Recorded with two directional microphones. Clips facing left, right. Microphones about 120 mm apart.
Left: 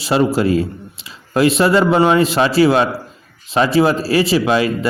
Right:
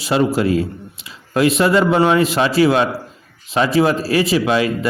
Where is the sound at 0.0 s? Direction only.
30° left (ahead or behind).